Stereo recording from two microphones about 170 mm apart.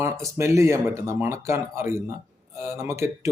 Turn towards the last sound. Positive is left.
turn(degrees=-15)  # may be behind; listen again after turning